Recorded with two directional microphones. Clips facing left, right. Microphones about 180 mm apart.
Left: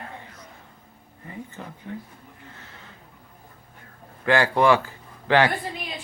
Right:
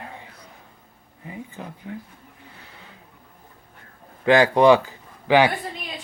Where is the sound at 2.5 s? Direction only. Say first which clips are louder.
Even; 15° right (ahead or behind).